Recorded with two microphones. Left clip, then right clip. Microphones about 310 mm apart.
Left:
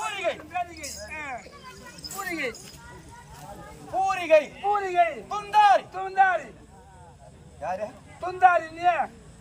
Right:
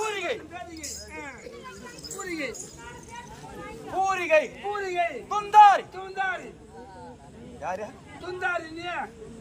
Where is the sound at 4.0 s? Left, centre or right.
Centre.